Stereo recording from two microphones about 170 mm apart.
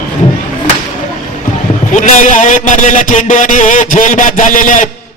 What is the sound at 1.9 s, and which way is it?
A man's voice, 45° left (ahead or behind).